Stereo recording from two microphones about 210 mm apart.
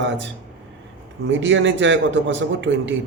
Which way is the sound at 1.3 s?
65° right (ahead or behind).